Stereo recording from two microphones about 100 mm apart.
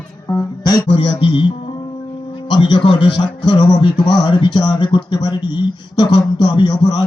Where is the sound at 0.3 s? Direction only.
40° left (ahead or behind).